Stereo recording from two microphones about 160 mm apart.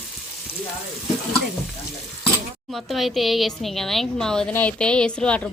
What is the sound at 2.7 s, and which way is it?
A woman's voice, centre (ahead or behind).